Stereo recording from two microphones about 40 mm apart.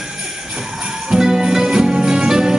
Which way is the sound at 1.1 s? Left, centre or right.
Centre.